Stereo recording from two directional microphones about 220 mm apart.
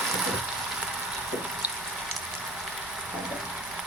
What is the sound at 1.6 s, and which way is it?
Frying, 10° right (ahead or behind).